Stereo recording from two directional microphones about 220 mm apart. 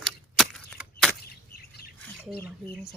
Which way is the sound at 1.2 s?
45° left (ahead or behind).